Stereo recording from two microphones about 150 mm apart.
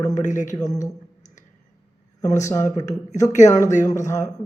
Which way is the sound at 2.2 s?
50° left (ahead or behind).